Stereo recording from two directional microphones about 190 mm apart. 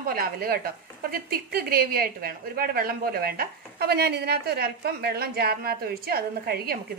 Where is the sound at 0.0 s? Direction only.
50° right (ahead or behind).